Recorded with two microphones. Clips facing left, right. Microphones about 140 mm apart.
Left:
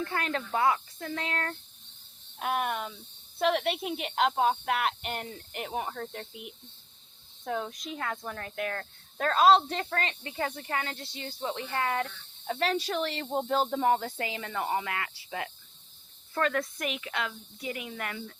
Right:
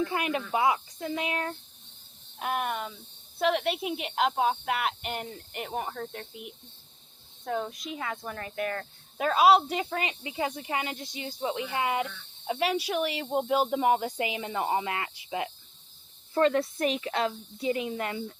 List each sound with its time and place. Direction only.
0.0 s speech: 15° right (ahead or behind)
2.4 s speech: centre (ahead or behind); by 18.3 s 25° right (ahead or behind)